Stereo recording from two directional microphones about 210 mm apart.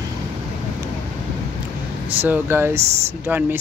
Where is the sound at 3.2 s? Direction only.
10° right (ahead or behind).